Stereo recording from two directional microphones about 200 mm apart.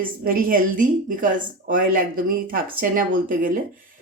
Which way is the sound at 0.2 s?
45° right (ahead or behind).